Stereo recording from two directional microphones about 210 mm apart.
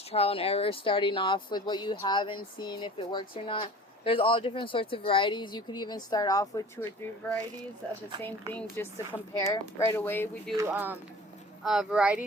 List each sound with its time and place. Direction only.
0.1 s speech: 30° left (ahead or behind)
8.2 s speech: 10° left (ahead or behind)
10.6 s speech: 10° right (ahead or behind)